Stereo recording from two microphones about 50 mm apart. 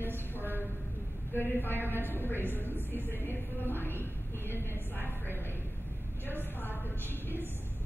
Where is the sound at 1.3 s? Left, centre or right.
Left.